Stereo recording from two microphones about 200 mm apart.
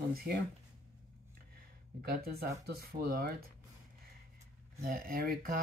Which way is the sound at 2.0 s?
50° right (ahead or behind).